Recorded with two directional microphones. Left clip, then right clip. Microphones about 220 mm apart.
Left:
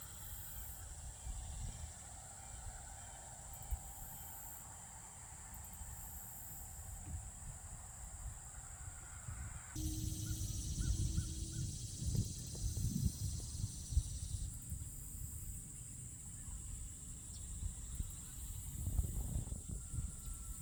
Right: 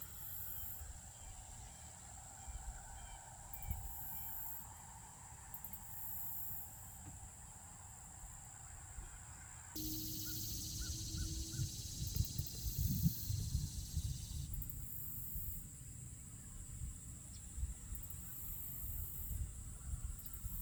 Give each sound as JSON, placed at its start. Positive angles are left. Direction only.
{"t": 9.7, "sound": "crow", "side_deg": -50}